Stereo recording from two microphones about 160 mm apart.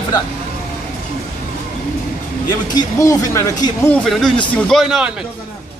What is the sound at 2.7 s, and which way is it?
Speech, 20° left (ahead or behind).